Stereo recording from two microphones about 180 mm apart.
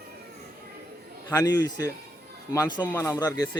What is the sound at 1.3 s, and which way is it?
Speech, 20° left (ahead or behind).